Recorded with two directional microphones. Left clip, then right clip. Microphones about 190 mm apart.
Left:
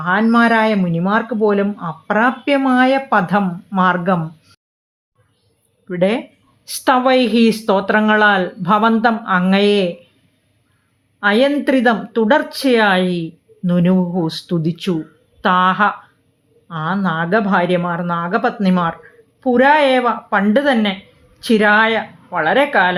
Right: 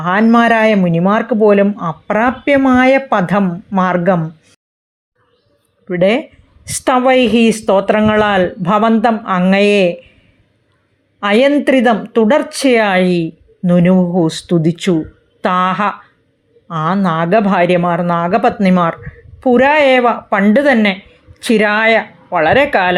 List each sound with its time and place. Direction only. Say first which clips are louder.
0.0 s speech: right 3 dB; 20° right (ahead or behind)
5.9 s speech: right 5 dB; 15° right (ahead or behind)
11.2 s speech: right 3 dB; 20° right (ahead or behind)